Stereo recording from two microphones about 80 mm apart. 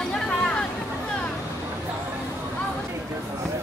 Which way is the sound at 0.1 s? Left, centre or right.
Centre.